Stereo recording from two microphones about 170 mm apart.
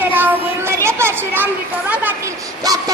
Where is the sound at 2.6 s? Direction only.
20° right (ahead or behind).